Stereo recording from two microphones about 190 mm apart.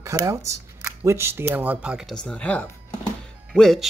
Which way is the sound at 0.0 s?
15° right (ahead or behind).